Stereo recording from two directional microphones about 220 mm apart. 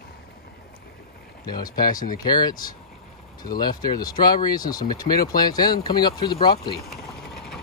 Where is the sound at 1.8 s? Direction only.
40° left (ahead or behind).